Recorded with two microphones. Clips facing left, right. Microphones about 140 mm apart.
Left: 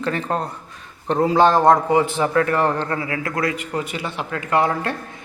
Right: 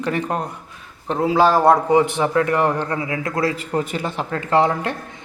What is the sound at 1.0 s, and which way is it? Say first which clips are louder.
Speech: left 1 dB; centre (ahead or behind).